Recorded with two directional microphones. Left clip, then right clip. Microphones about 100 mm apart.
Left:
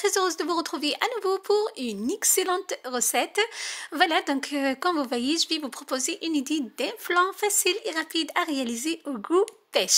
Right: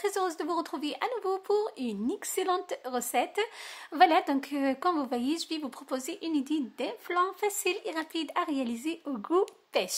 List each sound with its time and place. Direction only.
0.0 s speech: 25° left (ahead or behind)